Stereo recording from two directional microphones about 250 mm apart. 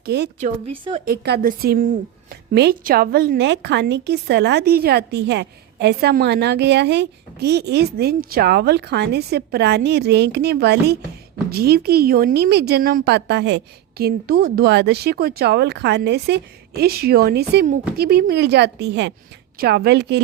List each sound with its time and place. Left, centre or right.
0.0 s speech: right
0.3 s speech: right
1.0 s a woman's voice: right